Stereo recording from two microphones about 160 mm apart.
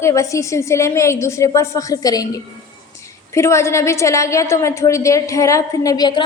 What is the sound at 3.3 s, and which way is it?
A woman's voice, 15° left (ahead or behind).